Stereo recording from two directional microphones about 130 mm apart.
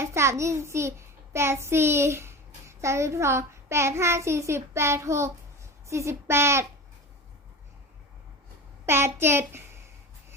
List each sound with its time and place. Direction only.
0.0 s a child's voice: 20° right (ahead or behind)
8.9 s a child's voice: 20° right (ahead or behind)